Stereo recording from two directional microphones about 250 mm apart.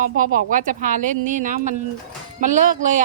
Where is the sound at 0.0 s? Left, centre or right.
Right.